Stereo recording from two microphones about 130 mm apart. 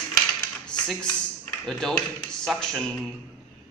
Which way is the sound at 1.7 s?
5° left (ahead or behind).